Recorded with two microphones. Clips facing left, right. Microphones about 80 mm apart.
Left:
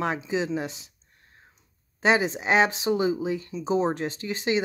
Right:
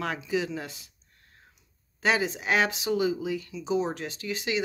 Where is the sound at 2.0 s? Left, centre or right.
Left.